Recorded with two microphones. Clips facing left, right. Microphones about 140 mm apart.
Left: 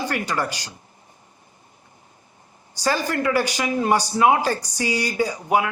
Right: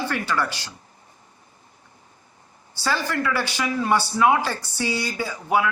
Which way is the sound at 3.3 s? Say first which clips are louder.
Left 3 dB; 15° left (ahead or behind).